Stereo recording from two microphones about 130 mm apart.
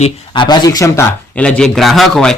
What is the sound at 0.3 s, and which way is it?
Speech, 35° left (ahead or behind).